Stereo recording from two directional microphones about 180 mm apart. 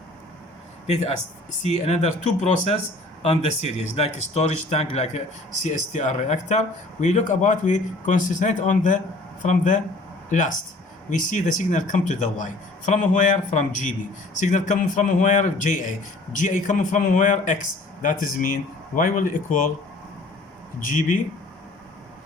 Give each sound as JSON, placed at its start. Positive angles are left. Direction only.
{"t": 0.9, "sound": "speech", "side_deg": 40}